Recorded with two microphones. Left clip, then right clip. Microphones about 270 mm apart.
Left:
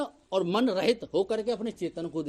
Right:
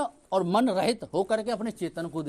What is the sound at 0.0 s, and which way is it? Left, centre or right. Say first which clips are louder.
Speech: right 2 dB; right.